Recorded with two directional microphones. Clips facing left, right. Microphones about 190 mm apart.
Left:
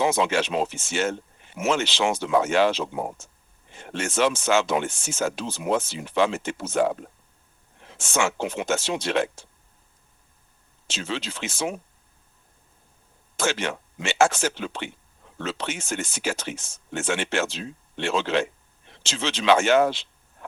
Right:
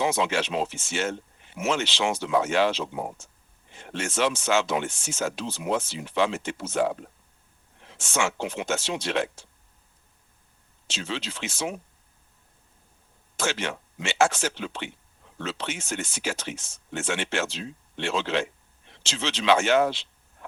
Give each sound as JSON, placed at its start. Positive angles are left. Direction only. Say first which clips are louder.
{"t": 0.0, "sound": "speech", "louder": "left 3 dB", "side_deg": 50}
{"t": 10.8, "sound": "speech", "louder": "left 2 dB", "side_deg": 45}
{"t": 13.3, "sound": "speech", "louder": "left 3 dB", "side_deg": 45}